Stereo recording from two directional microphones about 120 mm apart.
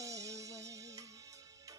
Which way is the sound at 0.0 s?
25° right (ahead or behind).